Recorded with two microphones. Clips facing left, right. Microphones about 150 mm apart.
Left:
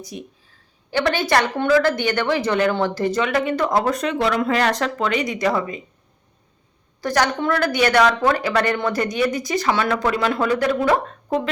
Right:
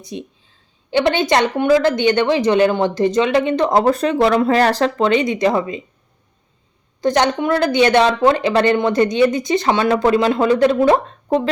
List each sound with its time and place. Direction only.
0.0 s speech: 25° right (ahead or behind)
7.0 s speech: 20° right (ahead or behind)